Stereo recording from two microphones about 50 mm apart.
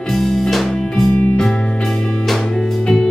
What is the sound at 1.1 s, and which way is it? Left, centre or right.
Music, left.